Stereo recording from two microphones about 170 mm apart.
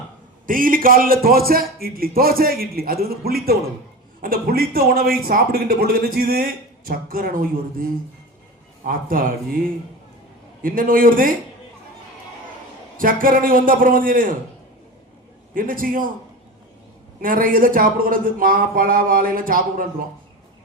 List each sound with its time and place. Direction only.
0.4 s a man's voice: 55° right (ahead or behind)
8.8 s a man's voice: 55° right (ahead or behind)
13.0 s a man's voice: 55° right (ahead or behind)
15.5 s a man's voice: 55° right (ahead or behind)
17.2 s a man's voice: 55° right (ahead or behind)